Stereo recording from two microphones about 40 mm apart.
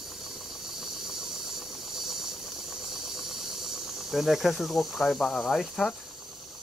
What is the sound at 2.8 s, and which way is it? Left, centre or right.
Snake, centre.